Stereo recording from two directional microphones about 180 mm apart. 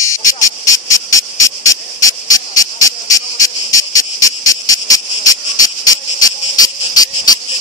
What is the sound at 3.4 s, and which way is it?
Cricket, 20° left (ahead or behind).